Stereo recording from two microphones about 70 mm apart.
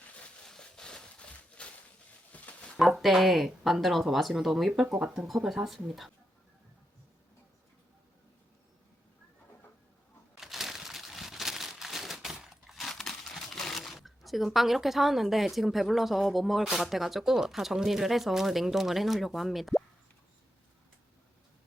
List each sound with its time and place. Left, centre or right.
0.4 s a sound: centre
2.7 s speech: centre
10.3 s crumpling: centre